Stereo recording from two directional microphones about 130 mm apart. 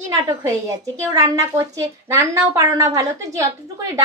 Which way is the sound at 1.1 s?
25° right (ahead or behind).